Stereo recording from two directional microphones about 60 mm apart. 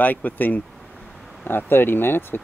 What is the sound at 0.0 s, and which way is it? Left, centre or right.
Speech, left.